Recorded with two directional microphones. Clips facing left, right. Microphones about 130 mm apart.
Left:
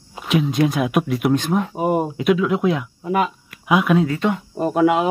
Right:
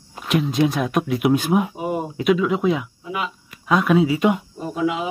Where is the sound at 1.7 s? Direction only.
50° left (ahead or behind).